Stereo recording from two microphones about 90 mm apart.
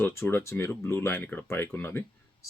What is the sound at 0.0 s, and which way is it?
Speech, 25° left (ahead or behind).